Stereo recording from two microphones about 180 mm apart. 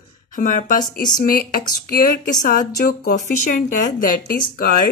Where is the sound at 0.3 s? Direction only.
45° left (ahead or behind).